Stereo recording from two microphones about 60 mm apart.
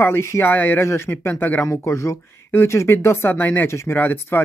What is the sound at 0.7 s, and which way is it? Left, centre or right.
Speech, left.